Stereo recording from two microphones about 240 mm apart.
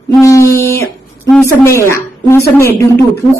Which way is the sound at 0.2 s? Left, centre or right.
Centre.